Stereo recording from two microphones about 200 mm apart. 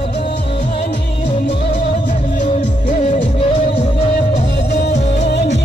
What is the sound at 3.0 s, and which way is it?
Music, 25° left (ahead or behind).